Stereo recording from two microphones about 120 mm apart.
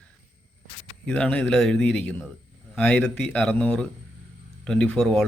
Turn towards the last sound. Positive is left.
turn(degrees=5)  # may be behind; listen again after turning